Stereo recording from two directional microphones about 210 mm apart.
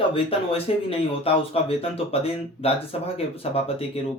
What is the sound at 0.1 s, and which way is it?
Speech, 25° left (ahead or behind).